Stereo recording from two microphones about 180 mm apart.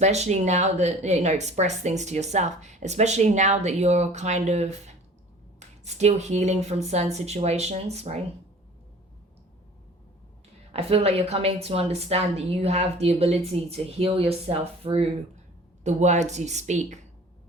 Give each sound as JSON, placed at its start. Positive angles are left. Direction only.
{"t": 0.0, "sound": "speech", "side_deg": -40}
{"t": 10.7, "sound": "speech", "side_deg": -35}